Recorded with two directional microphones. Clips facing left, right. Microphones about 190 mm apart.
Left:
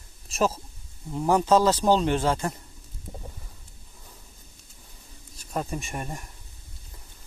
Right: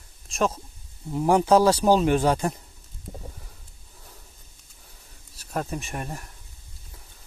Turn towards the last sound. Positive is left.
turn(degrees=0)  # may be behind; listen again after turning